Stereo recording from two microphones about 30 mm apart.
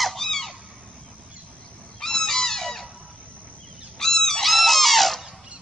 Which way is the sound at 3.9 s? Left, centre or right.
Centre.